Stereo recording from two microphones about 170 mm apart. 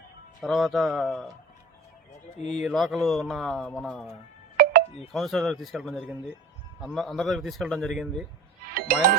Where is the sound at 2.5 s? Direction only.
Centre (ahead or behind).